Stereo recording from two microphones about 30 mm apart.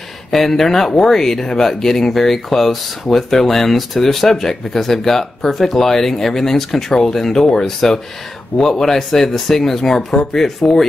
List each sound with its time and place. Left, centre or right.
0.3 s speech: centre